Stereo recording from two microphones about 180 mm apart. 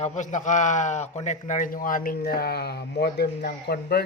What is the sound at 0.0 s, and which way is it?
A man's voice, 45° left (ahead or behind).